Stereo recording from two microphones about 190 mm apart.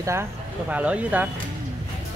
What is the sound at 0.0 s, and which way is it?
Speech, 15° right (ahead or behind).